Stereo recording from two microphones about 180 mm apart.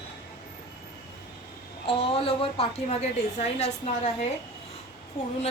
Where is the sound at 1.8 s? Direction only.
30° left (ahead or behind).